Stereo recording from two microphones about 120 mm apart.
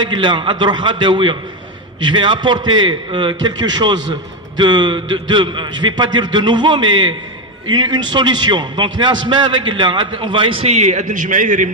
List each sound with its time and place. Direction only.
0.0 s a man's voice: 40° right (ahead or behind); by 11.7 s 90° right